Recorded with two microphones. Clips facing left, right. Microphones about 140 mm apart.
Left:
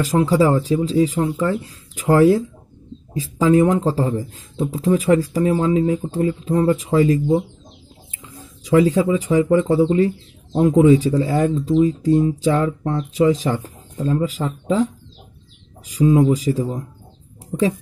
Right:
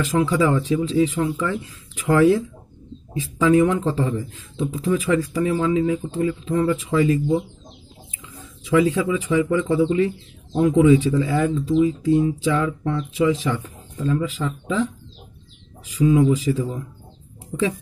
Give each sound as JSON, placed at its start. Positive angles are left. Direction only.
{"t": 0.0, "sound": "speech", "side_deg": 35}
{"t": 15.9, "sound": "speech", "side_deg": 40}